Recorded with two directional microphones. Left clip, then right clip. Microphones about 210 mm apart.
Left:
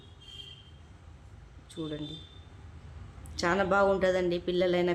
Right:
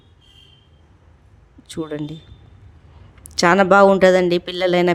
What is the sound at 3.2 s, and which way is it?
A woman's voice, 50° right (ahead or behind).